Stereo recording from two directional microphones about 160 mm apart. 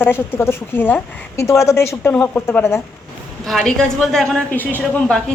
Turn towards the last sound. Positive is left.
turn(degrees=5)  # may be behind; listen again after turning